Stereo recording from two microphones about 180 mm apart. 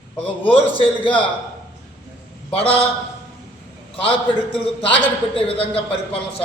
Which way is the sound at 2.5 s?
30° left (ahead or behind).